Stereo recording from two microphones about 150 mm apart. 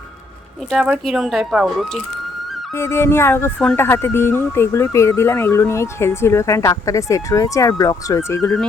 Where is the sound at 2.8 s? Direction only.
15° left (ahead or behind).